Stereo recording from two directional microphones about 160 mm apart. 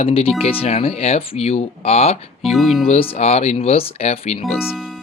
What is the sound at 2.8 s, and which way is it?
Speech, 35° left (ahead or behind).